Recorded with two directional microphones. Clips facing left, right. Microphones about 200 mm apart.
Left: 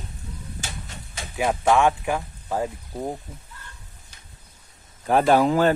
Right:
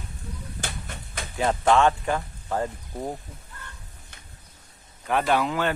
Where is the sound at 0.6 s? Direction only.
55° right (ahead or behind).